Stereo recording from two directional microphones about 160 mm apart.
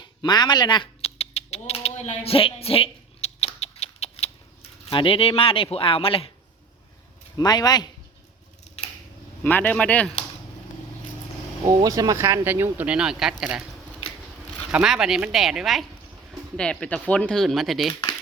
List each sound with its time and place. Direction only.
0.0 s speech: 25° left (ahead or behind)
1.2 s a sound: 40° left (ahead or behind)
5.7 s speech: 35° left (ahead or behind)
7.3 s speech: 25° left (ahead or behind)
9.4 s a man's voice: 10° left (ahead or behind)
11.8 s speech: 20° right (ahead or behind); by 13.6 s 5° right (ahead or behind)
14.7 s speech: 5° right (ahead or behind)